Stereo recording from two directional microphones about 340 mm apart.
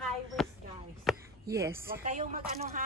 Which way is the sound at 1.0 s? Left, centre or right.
Centre.